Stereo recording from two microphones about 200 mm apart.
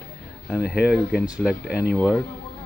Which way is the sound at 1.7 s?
50° left (ahead or behind).